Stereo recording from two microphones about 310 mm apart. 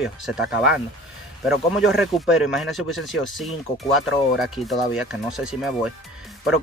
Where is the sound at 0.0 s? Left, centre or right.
Centre.